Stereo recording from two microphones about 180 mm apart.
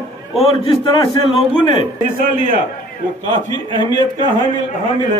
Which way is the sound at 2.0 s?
50° right (ahead or behind).